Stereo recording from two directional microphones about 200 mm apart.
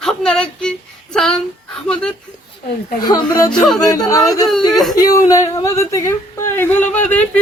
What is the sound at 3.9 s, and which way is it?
Speech, 20° left (ahead or behind).